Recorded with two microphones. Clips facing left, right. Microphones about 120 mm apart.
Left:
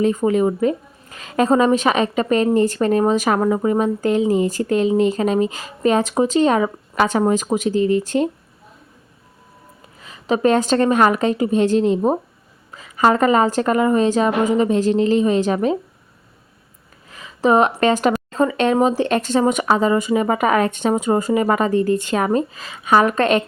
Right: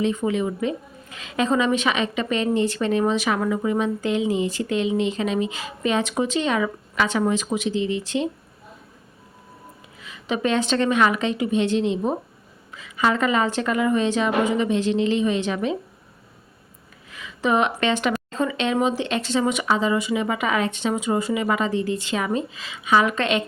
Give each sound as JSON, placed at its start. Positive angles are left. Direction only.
{"t": 0.0, "sound": "a woman's voice", "side_deg": 45}
{"t": 10.0, "sound": "a woman's voice", "side_deg": 40}
{"t": 17.1, "sound": "a woman's voice", "side_deg": 40}